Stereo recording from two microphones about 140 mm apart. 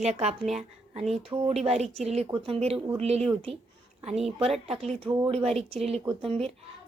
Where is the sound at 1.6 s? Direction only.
50° right (ahead or behind).